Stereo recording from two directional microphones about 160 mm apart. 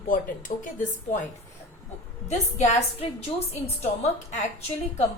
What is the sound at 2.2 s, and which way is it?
Speech, 45° left (ahead or behind).